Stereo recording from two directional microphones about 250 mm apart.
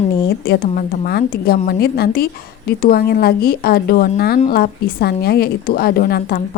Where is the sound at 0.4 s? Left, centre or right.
Left.